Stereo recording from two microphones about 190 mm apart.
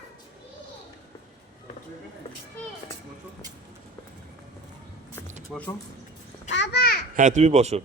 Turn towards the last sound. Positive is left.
turn(degrees=-35)  # may be behind; listen again after turning